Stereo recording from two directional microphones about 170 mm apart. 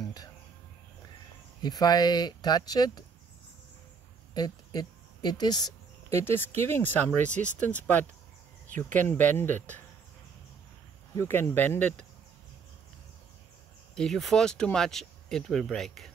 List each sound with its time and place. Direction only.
0.0 s a sound: 20° left (ahead or behind)
1.6 s speech: 25° left (ahead or behind)
4.3 s a sound: 25° left (ahead or behind)
6.0 s speech: 15° left (ahead or behind)
11.1 s speech: 15° left (ahead or behind)
13.9 s speech: 5° left (ahead or behind)